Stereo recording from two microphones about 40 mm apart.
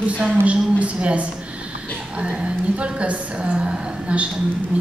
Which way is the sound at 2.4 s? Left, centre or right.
Right.